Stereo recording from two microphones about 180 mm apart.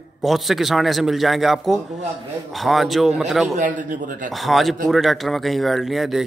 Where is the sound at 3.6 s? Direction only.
45° right (ahead or behind).